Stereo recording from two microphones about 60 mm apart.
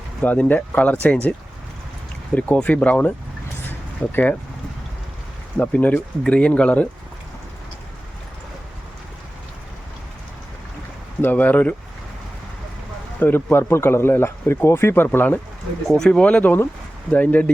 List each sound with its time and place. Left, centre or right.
0.2 s speech: left
3.7 s a sound: left
5.5 s speech: left
11.2 s speech: left
13.1 s speech: left
16.0 s speech: centre